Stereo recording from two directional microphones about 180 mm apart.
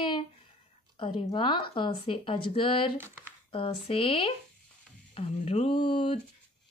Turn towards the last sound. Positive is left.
turn(degrees=25)  # may be behind; listen again after turning